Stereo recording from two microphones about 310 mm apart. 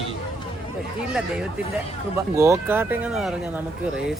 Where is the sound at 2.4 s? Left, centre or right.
Centre.